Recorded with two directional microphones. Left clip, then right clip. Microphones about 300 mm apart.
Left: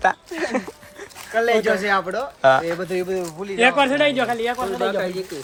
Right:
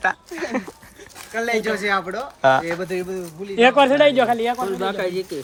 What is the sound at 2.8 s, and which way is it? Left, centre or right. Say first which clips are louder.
Speech: left 2 dB; left.